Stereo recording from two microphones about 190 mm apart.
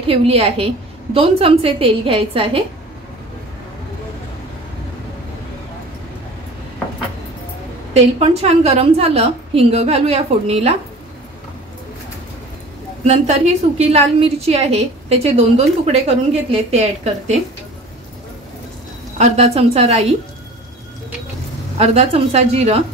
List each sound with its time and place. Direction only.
0.0 s a woman's voice: 30° right (ahead or behind)
7.9 s a woman's voice: 35° right (ahead or behind)
13.0 s a woman's voice: 35° right (ahead or behind)
19.1 s a woman's voice: 35° right (ahead or behind)
21.7 s a woman's voice: 35° right (ahead or behind)